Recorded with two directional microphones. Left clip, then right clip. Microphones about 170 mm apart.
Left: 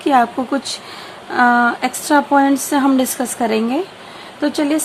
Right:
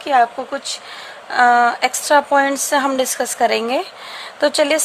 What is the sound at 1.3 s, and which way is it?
A woman's voice, 10° right (ahead or behind).